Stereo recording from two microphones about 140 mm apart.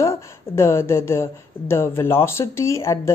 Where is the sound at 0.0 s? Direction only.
20° left (ahead or behind).